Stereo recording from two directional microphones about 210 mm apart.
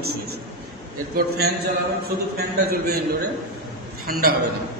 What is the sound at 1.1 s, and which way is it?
Speech, 50° right (ahead or behind).